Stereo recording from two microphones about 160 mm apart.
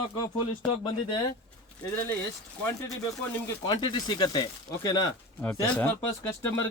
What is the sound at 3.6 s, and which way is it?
Speech, 30° left (ahead or behind).